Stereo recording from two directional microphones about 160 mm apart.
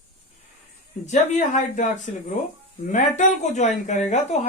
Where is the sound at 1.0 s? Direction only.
50° left (ahead or behind).